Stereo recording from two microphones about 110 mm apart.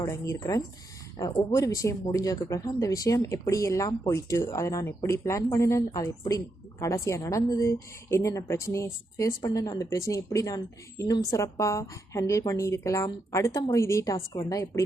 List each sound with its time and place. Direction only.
0.0 s speech: 25° left (ahead or behind)